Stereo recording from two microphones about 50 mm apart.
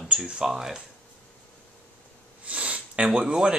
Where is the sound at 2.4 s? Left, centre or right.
Right.